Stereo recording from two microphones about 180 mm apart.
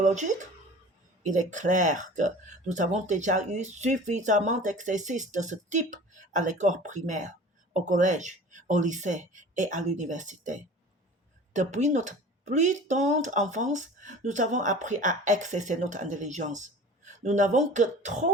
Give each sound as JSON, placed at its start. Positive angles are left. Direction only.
{"t": 0.0, "sound": "speech", "side_deg": -40}